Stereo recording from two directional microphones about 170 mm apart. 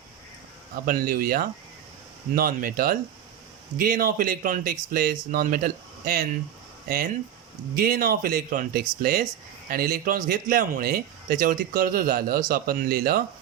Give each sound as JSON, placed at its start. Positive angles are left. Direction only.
{"t": 0.9, "sound": "speech", "side_deg": -60}